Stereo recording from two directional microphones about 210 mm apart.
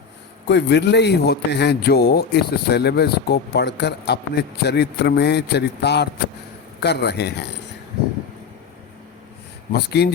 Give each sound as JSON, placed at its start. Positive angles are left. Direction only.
{"t": 0.4, "sound": "a man's voice", "side_deg": 55}
{"t": 9.7, "sound": "a man's voice", "side_deg": 50}